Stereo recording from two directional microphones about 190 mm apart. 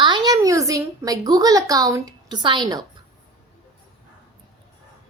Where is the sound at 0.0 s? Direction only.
25° right (ahead or behind).